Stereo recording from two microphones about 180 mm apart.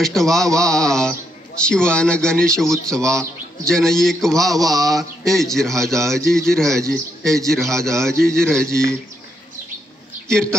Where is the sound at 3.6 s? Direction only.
5° left (ahead or behind).